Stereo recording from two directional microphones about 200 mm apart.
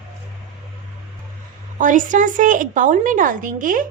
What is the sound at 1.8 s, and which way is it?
Speech, 40° right (ahead or behind).